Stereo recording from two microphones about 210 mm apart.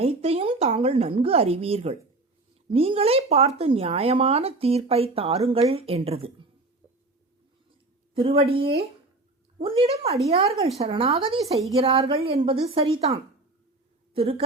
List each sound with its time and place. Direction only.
0.0 s speech: 30° right (ahead or behind)
8.1 s speech: 25° right (ahead or behind)
14.1 s a woman's voice: 25° right (ahead or behind)